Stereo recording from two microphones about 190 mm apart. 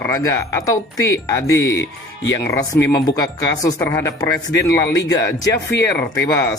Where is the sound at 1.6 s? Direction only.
75° left (ahead or behind).